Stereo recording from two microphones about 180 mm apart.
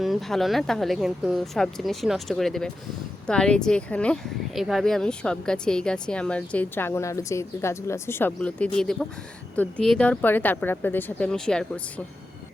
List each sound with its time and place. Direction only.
0.0 s speech: centre (ahead or behind)